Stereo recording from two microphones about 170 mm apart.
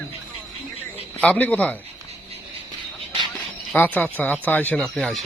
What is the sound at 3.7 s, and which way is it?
Speech, 10° left (ahead or behind).